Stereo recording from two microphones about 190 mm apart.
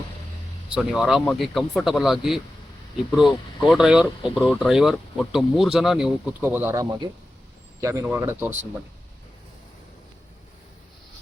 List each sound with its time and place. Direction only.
0.7 s speech: 5° right (ahead or behind)
3.7 s speech: 5° right (ahead or behind)